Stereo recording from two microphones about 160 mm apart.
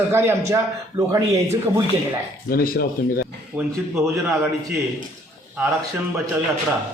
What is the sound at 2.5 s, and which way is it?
Speech, 70° left (ahead or behind).